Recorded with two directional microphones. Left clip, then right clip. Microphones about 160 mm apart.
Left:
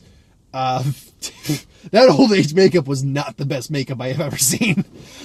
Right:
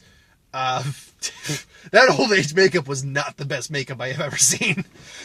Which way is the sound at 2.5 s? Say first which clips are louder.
Left 3 dB; 40° right (ahead or behind).